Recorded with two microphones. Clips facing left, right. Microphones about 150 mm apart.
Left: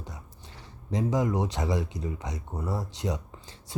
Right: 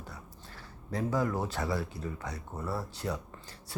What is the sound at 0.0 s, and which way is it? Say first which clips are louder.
Speech: left 2 dB; 20° left (ahead or behind).